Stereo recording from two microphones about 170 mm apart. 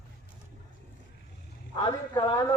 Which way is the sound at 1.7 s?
30° left (ahead or behind).